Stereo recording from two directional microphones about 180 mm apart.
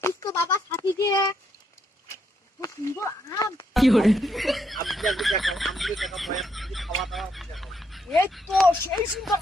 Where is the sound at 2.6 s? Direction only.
15° left (ahead or behind).